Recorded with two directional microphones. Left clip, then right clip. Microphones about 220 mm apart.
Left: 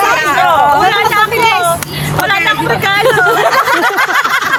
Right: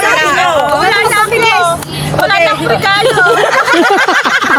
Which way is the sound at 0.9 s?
30° left (ahead or behind).